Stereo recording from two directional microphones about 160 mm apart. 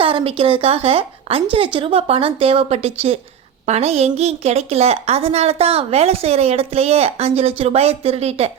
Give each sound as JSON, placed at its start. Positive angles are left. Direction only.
{"t": 0.0, "sound": "a woman's voice", "side_deg": -35}